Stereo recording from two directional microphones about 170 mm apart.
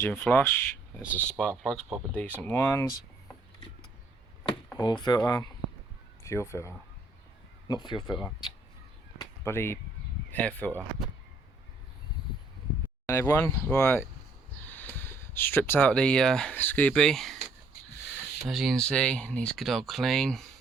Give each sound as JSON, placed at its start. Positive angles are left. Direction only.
{"t": 0.0, "sound": "speech", "side_deg": 10}
{"t": 4.4, "sound": "speech", "side_deg": 25}
{"t": 9.1, "sound": "a sound", "side_deg": 15}
{"t": 10.3, "sound": "speech", "side_deg": 10}
{"t": 13.1, "sound": "speech", "side_deg": 15}
{"t": 18.4, "sound": "speech", "side_deg": 0}